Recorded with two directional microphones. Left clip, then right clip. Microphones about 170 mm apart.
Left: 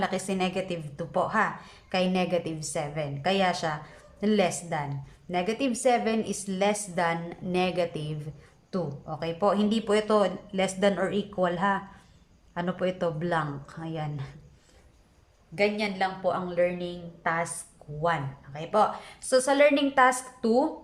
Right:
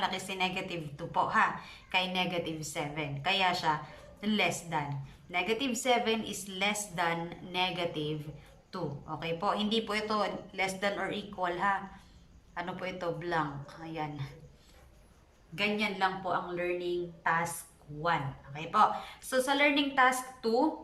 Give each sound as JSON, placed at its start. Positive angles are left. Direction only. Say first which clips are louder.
{"t": 0.0, "sound": "a woman's voice", "louder": "left 3 dB", "side_deg": 35}
{"t": 15.5, "sound": "speech", "louder": "left 5 dB", "side_deg": 30}
{"t": 18.0, "sound": "a woman's voice", "louder": "left 3 dB", "side_deg": 35}